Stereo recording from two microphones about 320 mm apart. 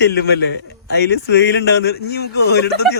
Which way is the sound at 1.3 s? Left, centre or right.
Left.